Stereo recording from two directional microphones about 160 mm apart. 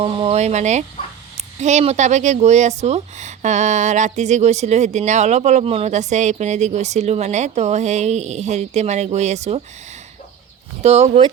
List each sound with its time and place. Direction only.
0.0 s speech: 40° right (ahead or behind)
10.8 s speech: 40° right (ahead or behind)